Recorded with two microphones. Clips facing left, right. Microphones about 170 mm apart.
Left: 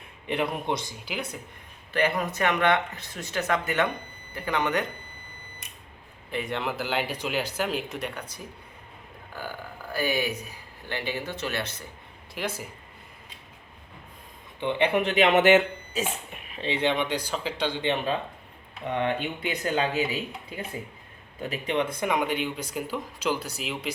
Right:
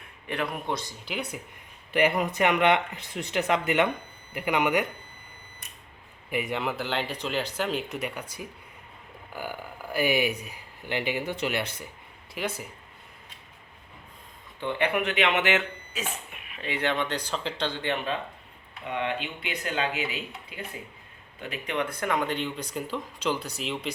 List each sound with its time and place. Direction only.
0.3 s a man's voice: 20° left (ahead or behind)
1.0 s speech: centre (ahead or behind)
1.9 s speech: 15° right (ahead or behind)
6.3 s speech: 5° right (ahead or behind)
12.3 s speech: centre (ahead or behind)
14.6 s a man's voice: 20° left (ahead or behind)
15.0 s speech: 40° left (ahead or behind)
16.5 s speech: 25° left (ahead or behind); by 17.7 s 5° left (ahead or behind)
17.7 s a man's voice: 20° left (ahead or behind)
18.9 s speech: 45° left (ahead or behind)
21.4 s speech: 30° left (ahead or behind); by 23.9 s 5° left (ahead or behind)